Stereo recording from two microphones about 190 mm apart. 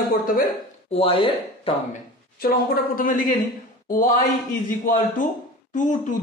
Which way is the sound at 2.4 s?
50° left (ahead or behind).